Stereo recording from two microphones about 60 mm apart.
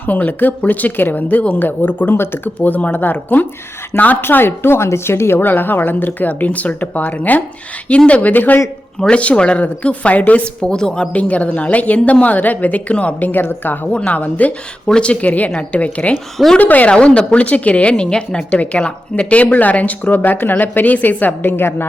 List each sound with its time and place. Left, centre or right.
0.0 s speech: left
2.6 s speech: left
9.0 s speech: centre; by 21.8 s left